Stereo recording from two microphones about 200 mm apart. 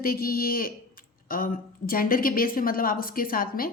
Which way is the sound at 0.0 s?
45° left (ahead or behind).